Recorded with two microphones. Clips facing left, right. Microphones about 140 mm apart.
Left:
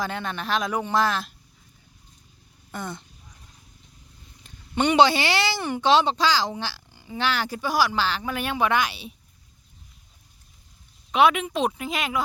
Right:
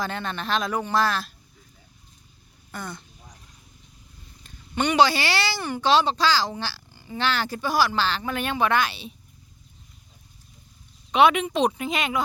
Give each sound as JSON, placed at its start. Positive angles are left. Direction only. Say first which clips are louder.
{"t": 0.0, "sound": "speech", "louder": "even", "side_deg": 10}
{"t": 2.7, "sound": "speech", "louder": "left 2 dB", "side_deg": 25}
{"t": 4.4, "sound": "speech", "louder": "left 2 dB", "side_deg": 20}
{"t": 11.1, "sound": "speech", "louder": "right 1 dB", "side_deg": 0}